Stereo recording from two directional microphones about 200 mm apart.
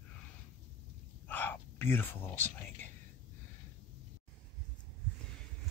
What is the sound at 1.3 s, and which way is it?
Speech, 10° left (ahead or behind).